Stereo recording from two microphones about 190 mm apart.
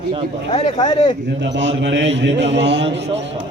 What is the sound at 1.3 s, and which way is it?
A man's voice, 70° right (ahead or behind).